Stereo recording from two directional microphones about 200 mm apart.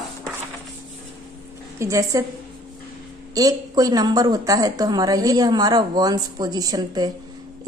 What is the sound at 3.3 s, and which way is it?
A woman's voice, 20° right (ahead or behind).